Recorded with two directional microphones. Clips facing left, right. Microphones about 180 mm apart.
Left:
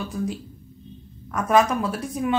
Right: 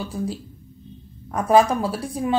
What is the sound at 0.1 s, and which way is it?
Speech, 30° right (ahead or behind).